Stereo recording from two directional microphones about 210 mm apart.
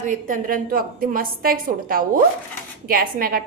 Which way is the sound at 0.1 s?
40° right (ahead or behind).